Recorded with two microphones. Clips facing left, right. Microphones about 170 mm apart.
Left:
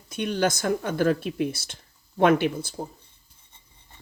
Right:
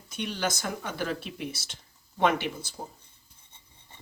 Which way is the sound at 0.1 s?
55° left (ahead or behind).